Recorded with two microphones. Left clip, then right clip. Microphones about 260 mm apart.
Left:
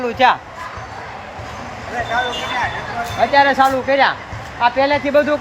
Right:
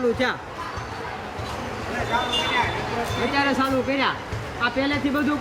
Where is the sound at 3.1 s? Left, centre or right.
Centre.